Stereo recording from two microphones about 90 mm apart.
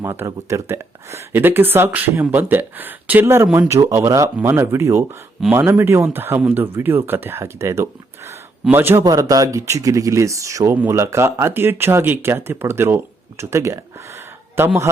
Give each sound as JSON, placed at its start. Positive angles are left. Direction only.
{"t": 0.0, "sound": "speech", "side_deg": -30}
{"t": 9.0, "sound": "speech", "side_deg": -40}